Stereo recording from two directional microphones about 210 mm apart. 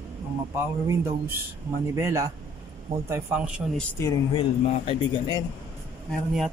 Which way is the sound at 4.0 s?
20° left (ahead or behind).